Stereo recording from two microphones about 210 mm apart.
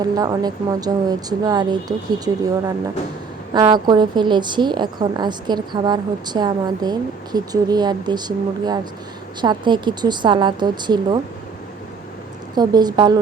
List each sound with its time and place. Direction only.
0.0 s a woman's voice: 20° right (ahead or behind)
12.5 s a woman's voice: 20° right (ahead or behind)